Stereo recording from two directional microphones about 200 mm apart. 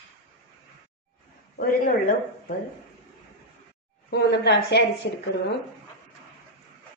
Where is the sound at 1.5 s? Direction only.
45° left (ahead or behind).